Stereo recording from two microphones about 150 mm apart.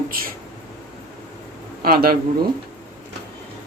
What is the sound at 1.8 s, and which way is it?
Speech, 85° right.